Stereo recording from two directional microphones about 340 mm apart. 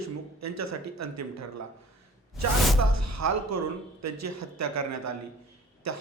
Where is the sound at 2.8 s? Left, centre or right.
Right.